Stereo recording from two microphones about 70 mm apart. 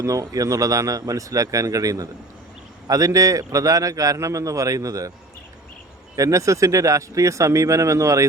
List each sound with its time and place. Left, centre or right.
0.0 s a man's voice: right
6.1 s a man's voice: right